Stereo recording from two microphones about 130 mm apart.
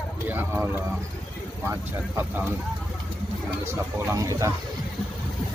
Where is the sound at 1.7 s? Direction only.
15° right (ahead or behind).